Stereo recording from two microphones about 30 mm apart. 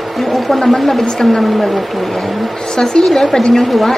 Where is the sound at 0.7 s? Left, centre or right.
Centre.